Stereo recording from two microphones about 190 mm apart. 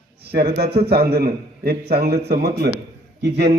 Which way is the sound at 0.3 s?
55° right (ahead or behind).